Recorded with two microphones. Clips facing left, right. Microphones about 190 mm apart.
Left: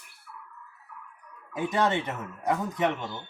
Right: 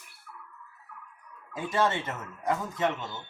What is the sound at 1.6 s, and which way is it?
Speech, 20° left (ahead or behind).